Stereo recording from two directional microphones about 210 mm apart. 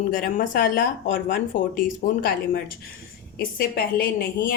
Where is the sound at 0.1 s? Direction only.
40° left (ahead or behind).